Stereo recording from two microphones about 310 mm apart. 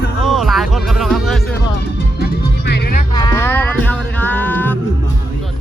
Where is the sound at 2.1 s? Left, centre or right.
Left.